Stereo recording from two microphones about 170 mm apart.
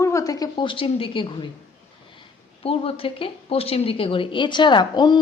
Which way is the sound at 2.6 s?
35° left (ahead or behind).